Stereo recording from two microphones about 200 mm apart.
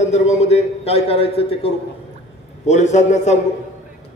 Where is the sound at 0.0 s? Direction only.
35° left (ahead or behind).